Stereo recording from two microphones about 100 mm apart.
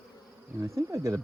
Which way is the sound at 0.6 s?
30° right (ahead or behind).